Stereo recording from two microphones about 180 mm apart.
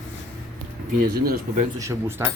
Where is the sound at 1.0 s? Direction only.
55° right (ahead or behind).